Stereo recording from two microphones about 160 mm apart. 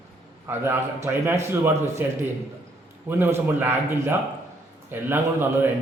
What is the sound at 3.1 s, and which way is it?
A man's voice, 15° right (ahead or behind).